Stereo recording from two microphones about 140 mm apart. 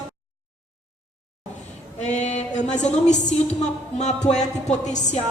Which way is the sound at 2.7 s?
60° left (ahead or behind).